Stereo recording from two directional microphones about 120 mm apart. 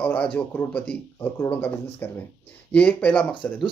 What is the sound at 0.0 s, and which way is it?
Speech, 15° left (ahead or behind).